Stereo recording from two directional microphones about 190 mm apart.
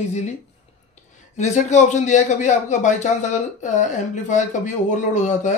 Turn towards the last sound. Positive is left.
turn(degrees=40)  # may be behind; listen again after turning